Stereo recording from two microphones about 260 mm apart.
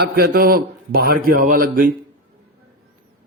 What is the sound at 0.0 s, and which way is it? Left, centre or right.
Speech, right.